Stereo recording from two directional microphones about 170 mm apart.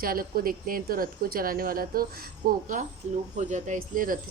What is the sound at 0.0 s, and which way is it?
A woman's voice, 60° right (ahead or behind).